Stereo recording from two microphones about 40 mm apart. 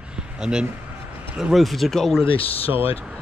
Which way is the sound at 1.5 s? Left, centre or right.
Centre.